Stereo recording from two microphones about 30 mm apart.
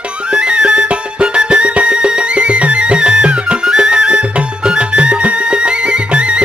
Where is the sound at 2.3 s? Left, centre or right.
Right.